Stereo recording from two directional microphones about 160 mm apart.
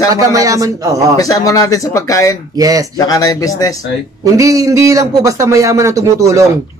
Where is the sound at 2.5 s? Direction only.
20° right (ahead or behind).